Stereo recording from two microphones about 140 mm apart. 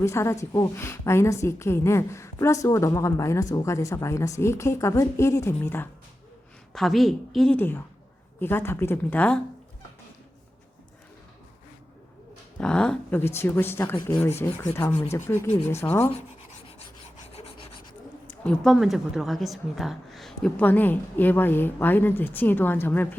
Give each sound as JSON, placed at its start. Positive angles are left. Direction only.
{"t": 0.0, "sound": "a woman's voice", "side_deg": 20}
{"t": 6.7, "sound": "a woman's voice", "side_deg": 0}
{"t": 8.4, "sound": "a woman's voice", "side_deg": 15}
{"t": 12.5, "sound": "a woman's voice", "side_deg": 5}
{"t": 18.3, "sound": "a woman's voice", "side_deg": 5}